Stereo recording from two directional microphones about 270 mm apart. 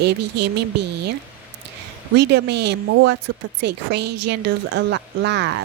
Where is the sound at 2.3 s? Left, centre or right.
Right.